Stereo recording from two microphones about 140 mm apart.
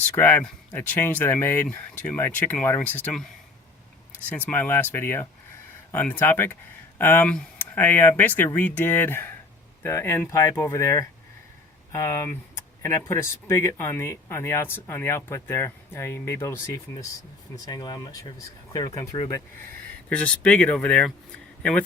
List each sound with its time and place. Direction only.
0.2 s speech: 15° left (ahead or behind)
4.3 s speech: 10° left (ahead or behind)
20.1 s a man's voice: 10° left (ahead or behind)